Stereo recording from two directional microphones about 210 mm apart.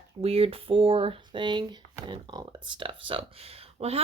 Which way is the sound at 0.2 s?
30° right (ahead or behind).